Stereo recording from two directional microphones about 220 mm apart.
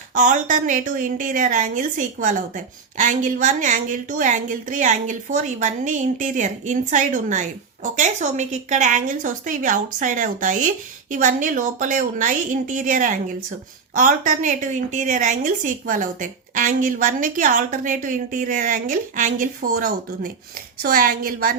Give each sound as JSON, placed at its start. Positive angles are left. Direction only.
{"t": 0.1, "sound": "a woman's voice", "side_deg": -35}